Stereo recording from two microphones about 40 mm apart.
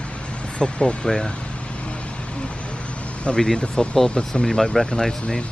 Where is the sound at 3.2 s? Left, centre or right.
Left.